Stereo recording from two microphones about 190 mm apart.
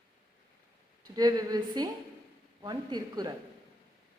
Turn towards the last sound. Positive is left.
turn(degrees=-20)  # may be behind; listen again after turning